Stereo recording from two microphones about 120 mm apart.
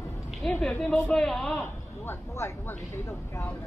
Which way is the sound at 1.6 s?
20° left (ahead or behind).